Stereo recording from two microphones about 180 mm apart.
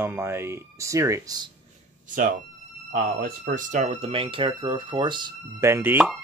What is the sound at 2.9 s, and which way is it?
Speech, 50° right (ahead or behind).